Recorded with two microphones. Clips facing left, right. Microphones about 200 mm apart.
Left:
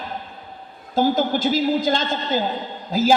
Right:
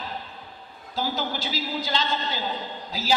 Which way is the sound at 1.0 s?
50° left (ahead or behind).